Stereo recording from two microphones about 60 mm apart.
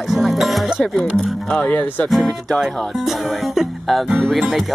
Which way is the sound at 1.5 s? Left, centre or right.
Left.